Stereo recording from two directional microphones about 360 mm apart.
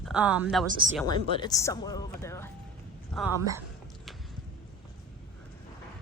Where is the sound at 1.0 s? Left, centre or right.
Centre.